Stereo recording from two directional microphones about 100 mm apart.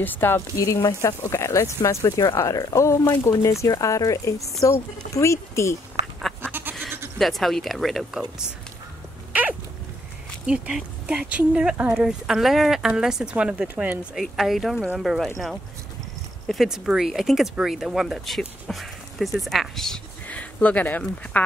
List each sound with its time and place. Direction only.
0.0 s speech: 20° left (ahead or behind)
6.4 s goat: 20° right (ahead or behind)
7.2 s speech: centre (ahead or behind)
9.3 s a sound: 15° right (ahead or behind)
10.4 s speech: 10° right (ahead or behind)
18.7 s a sound: centre (ahead or behind)
19.4 s speech: centre (ahead or behind)
20.2 s speech: 15° left (ahead or behind)